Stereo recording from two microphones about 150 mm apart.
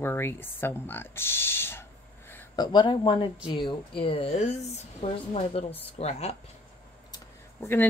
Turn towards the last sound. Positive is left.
turn(degrees=15)  # may be behind; listen again after turning